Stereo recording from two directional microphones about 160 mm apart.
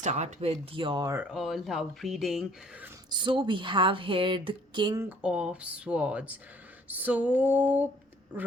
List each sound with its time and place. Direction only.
0.0 s speech: 50° right (ahead or behind); by 1.1 s 30° right (ahead or behind)
1.1 s speech: 5° right (ahead or behind)
3.1 s speech: 30° right (ahead or behind)
4.9 s speech: 10° right (ahead or behind)